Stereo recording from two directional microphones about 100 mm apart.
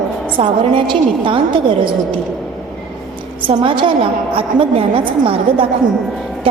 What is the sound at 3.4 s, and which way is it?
A woman's voice, 60° right (ahead or behind).